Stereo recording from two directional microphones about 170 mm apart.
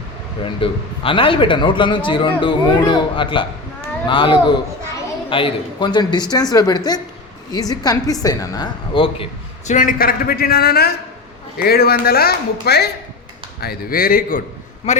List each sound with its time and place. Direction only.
0.4 s speech: 30° left (ahead or behind)
9.7 s speech: 55° left (ahead or behind)
14.9 s a man's voice: 40° left (ahead or behind)